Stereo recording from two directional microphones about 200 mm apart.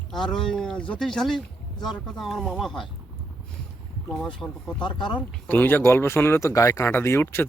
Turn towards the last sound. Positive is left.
turn(degrees=10)  # may be behind; listen again after turning